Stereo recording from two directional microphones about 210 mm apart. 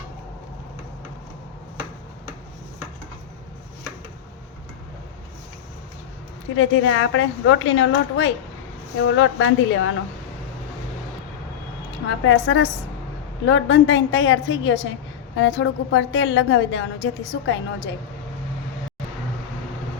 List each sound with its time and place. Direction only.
6.6 s a woman's voice: 70° left (ahead or behind)
12.0 s a woman's voice: 70° left (ahead or behind)